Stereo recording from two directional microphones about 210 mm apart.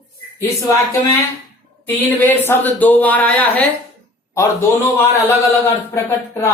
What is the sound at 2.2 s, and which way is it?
A man's voice, 10° left (ahead or behind).